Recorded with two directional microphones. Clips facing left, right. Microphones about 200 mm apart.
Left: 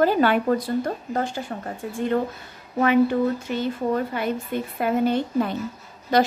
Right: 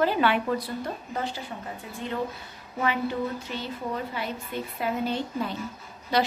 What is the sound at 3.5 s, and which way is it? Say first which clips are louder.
A woman's voice: left 8 dB; 50° left (ahead or behind).